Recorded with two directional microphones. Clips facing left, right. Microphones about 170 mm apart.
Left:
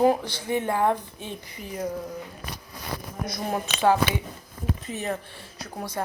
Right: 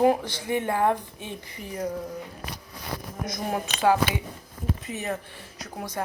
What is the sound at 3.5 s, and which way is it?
Speech, 25° left (ahead or behind).